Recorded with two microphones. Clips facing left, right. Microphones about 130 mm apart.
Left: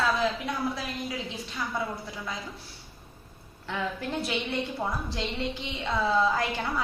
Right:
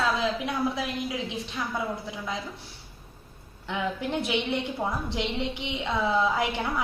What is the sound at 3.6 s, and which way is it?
A woman's voice, 20° right (ahead or behind).